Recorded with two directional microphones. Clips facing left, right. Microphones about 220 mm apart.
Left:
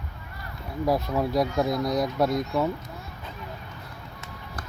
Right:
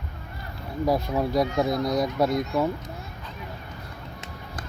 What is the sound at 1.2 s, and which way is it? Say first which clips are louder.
Speech: right 1 dB; centre (ahead or behind).